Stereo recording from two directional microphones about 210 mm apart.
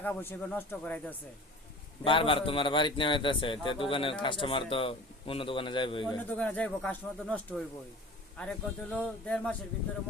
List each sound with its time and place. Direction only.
0.0 s speech: 10° left (ahead or behind)
2.0 s speech: 25° left (ahead or behind)
6.3 s speech: 5° left (ahead or behind)